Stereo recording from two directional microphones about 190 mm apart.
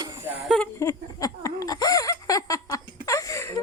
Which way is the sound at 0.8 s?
15° left (ahead or behind).